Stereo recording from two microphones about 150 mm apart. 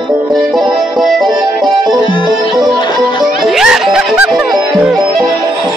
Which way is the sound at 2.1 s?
30° left (ahead or behind).